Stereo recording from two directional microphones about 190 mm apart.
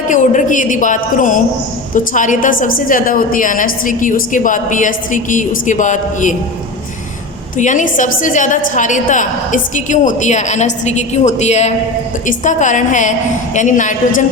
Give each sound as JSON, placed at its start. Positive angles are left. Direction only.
{"t": 0.1, "sound": "a woman's voice", "side_deg": 40}
{"t": 7.6, "sound": "a woman's voice", "side_deg": 40}